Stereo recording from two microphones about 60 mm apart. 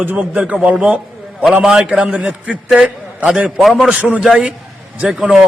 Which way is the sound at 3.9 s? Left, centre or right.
Centre.